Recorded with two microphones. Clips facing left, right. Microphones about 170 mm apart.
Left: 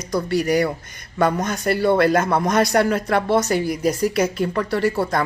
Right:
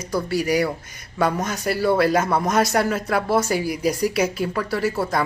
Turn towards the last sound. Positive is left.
turn(degrees=-5)  # may be behind; listen again after turning